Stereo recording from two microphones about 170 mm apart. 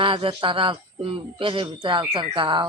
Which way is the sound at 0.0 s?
30° right (ahead or behind).